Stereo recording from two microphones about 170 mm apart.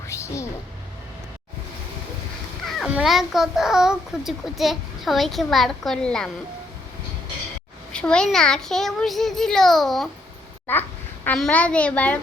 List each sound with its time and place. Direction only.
0.1 s a sound: 15° left (ahead or behind)
2.6 s a child's voice: centre (ahead or behind)
7.9 s a child's voice: 5° left (ahead or behind)